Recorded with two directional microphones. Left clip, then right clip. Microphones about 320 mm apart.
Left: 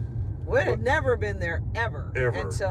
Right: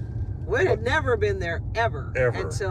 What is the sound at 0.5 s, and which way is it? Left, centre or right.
Speech, centre.